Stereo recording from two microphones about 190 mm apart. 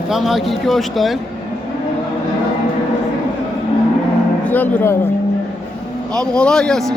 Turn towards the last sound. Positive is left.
turn(degrees=5)  # may be behind; listen again after turning